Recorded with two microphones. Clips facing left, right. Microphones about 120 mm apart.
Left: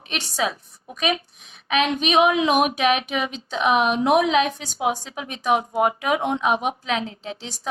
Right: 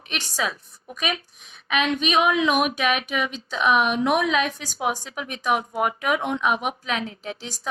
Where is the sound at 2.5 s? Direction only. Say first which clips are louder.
Left 3 dB; 35° left (ahead or behind).